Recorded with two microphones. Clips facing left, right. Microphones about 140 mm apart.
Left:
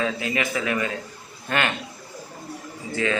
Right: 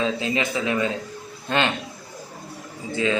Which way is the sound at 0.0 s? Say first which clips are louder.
Right 2 dB; 25° right (ahead or behind).